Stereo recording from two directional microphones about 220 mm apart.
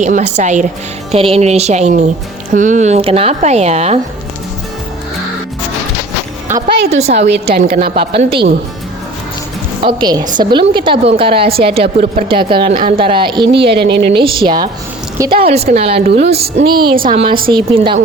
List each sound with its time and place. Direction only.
0.0 s a woman's voice: 35° right (ahead or behind)
6.9 s a woman's voice: 30° right (ahead or behind)
7.6 s speech: 45° right (ahead or behind)
8.1 s a woman's voice: 25° right (ahead or behind)
9.8 s a woman's voice: 20° right (ahead or behind)
13.8 s speech: 50° right (ahead or behind)
14.2 s a woman's voice: 25° right (ahead or behind)